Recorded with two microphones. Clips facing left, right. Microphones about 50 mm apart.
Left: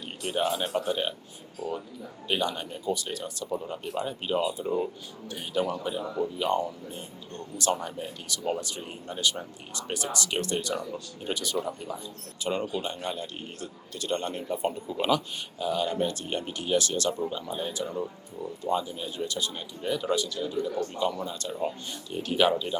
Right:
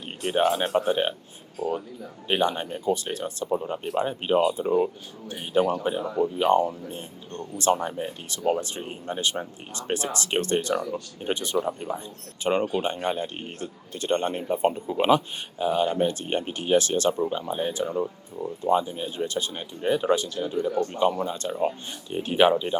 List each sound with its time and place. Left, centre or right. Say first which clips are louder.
0.2 s a man's voice: right 5 dB; right
2.2 s a man's voice: right 5 dB; right